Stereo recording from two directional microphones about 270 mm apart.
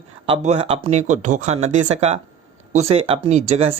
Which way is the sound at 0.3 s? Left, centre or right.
Right.